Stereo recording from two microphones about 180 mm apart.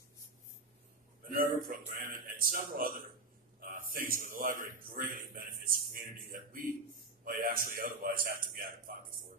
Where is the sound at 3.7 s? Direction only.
50° right (ahead or behind).